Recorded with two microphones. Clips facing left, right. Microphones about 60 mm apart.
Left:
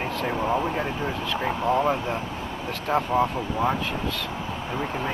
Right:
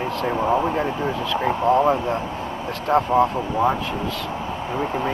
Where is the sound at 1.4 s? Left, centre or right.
Centre.